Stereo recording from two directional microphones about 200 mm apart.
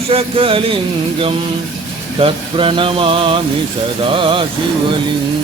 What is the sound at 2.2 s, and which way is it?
Speech, 25° right (ahead or behind).